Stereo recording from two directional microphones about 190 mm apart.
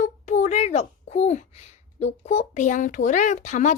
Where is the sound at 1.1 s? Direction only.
35° left (ahead or behind).